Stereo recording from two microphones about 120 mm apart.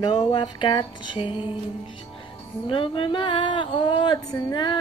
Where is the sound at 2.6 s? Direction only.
45° left (ahead or behind).